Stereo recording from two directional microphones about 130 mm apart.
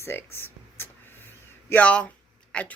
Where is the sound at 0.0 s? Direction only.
15° left (ahead or behind).